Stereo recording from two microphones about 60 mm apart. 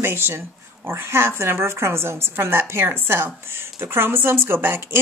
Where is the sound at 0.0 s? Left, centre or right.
Right.